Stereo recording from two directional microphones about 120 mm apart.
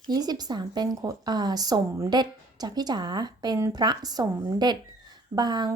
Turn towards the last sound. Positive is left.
turn(degrees=-35)  # may be behind; listen again after turning